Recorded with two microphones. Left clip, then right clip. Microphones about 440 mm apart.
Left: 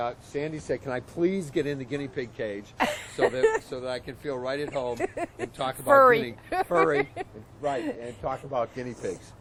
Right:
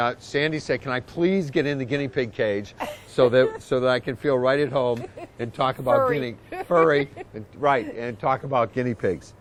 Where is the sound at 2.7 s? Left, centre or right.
Left.